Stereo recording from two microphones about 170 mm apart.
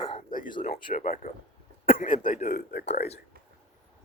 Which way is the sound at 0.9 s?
50° left (ahead or behind).